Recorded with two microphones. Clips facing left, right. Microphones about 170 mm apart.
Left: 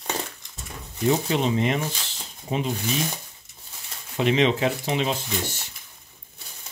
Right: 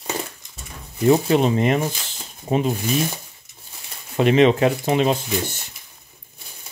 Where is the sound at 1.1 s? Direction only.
50° right (ahead or behind).